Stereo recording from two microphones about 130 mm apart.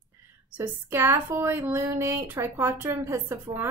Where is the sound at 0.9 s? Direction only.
15° right (ahead or behind).